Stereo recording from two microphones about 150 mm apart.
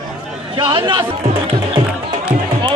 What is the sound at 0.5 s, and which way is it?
Speech, 30° right (ahead or behind).